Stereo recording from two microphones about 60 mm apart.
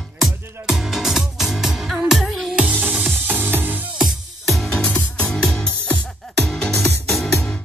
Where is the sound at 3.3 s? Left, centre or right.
Right.